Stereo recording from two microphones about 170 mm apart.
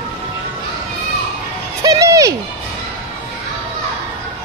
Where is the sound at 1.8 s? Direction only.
20° right (ahead or behind).